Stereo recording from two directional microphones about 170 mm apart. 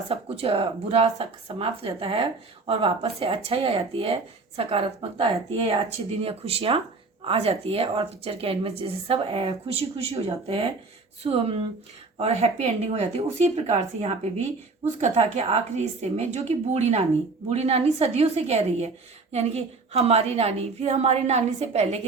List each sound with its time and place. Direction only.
0.1 s speech: 35° right (ahead or behind)